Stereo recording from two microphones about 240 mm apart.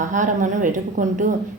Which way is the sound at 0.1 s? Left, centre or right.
Right.